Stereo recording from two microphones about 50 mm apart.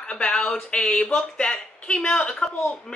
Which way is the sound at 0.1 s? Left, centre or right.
Centre.